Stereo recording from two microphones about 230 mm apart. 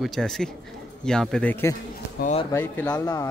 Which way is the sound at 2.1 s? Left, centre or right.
Left.